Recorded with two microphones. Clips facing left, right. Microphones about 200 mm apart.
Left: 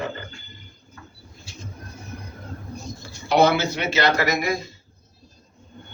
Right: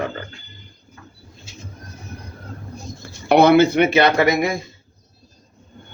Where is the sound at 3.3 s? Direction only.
60° right (ahead or behind).